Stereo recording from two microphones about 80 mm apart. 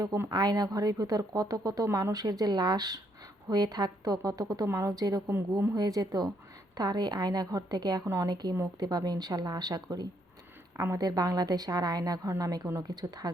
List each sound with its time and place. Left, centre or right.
0.3 s speech: right
5.3 s speech: right
5.7 s a woman's voice: right
8.0 s a woman's voice: right
8.3 s a woman's voice: right